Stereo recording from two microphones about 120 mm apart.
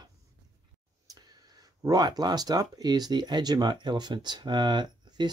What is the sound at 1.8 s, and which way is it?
Speech, 35° right (ahead or behind).